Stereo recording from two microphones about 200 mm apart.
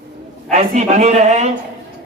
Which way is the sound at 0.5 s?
35° right (ahead or behind).